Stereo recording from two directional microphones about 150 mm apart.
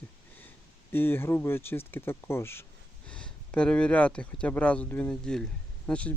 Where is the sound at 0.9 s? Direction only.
15° left (ahead or behind).